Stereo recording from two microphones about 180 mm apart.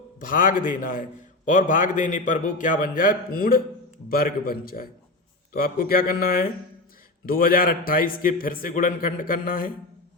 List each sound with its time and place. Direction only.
0.2 s a man's voice: 50° left (ahead or behind)